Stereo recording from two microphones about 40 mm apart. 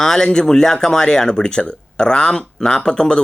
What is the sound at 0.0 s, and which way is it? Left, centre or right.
Speech, centre.